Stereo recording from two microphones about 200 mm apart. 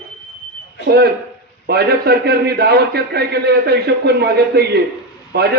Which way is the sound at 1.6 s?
55° right (ahead or behind).